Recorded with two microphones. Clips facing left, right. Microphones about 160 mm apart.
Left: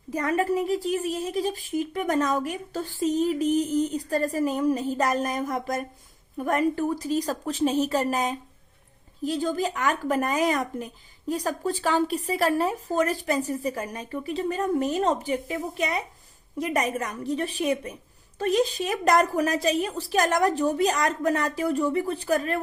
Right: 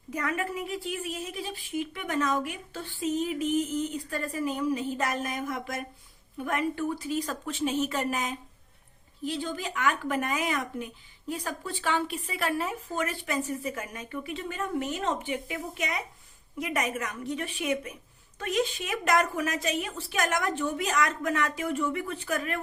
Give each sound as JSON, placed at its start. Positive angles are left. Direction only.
{"t": 0.1, "sound": "a woman's voice", "side_deg": 35}